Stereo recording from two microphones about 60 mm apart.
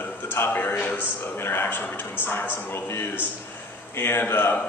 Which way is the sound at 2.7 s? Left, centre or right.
Left.